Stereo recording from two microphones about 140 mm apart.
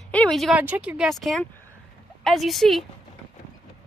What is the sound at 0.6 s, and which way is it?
A woman's voice, 10° right (ahead or behind).